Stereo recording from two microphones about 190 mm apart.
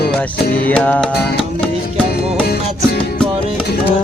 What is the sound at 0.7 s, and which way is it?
Music, 5° left (ahead or behind).